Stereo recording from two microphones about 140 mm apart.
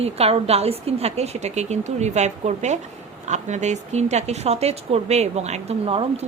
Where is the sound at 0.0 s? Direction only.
45° right (ahead or behind).